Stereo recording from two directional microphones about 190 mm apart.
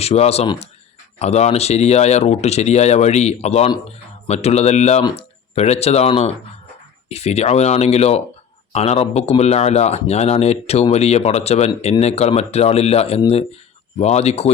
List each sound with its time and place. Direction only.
0.0 s speech: 35° left (ahead or behind)